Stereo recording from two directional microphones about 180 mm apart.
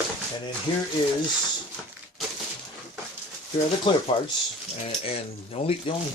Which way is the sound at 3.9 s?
25° left (ahead or behind).